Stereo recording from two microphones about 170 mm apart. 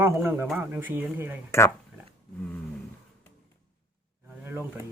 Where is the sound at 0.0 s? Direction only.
15° right (ahead or behind).